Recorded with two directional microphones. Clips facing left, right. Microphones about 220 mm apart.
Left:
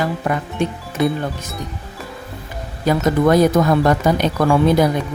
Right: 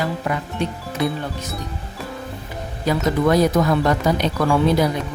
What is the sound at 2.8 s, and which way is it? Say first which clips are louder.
Speech: left 3 dB; 50° left (ahead or behind).